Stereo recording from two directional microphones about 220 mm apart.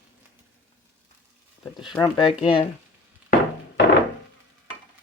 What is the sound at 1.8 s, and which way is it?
Speech, 20° left (ahead or behind).